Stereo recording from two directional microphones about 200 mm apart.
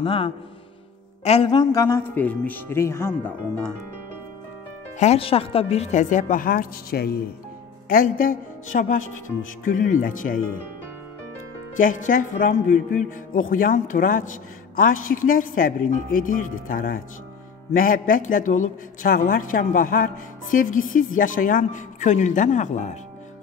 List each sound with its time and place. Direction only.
0.0 s speech: 25° left (ahead or behind)
4.9 s a woman's voice: 35° left (ahead or behind)
11.7 s a woman's voice: 40° left (ahead or behind)